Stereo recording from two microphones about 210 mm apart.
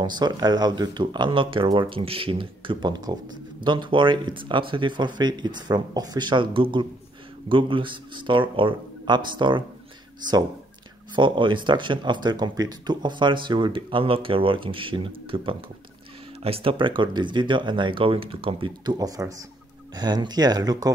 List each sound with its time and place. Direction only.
0.0 s speech: 20° right (ahead or behind)
11.1 s speech: 25° right (ahead or behind)